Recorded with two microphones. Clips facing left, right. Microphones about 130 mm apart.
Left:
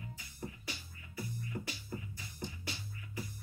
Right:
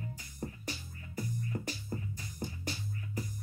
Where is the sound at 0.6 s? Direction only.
40° right (ahead or behind).